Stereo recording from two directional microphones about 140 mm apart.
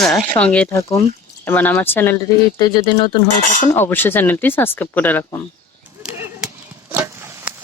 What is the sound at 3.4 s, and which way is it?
Cutlery, 65° left (ahead or behind).